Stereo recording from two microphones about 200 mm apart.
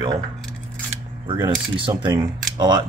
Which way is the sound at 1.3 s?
25° right (ahead or behind).